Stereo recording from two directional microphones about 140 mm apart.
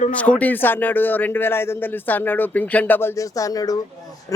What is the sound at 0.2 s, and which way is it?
A man's voice, 10° left (ahead or behind).